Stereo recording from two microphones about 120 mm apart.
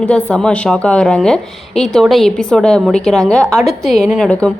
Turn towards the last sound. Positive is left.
turn(degrees=5)  # may be behind; listen again after turning